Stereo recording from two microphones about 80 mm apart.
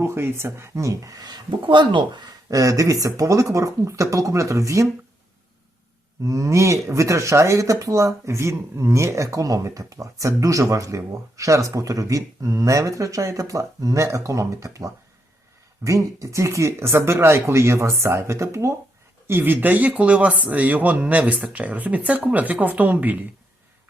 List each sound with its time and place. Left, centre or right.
0.0 s speech: right
2.5 s speech: right
6.2 s speech: right
19.3 s speech: right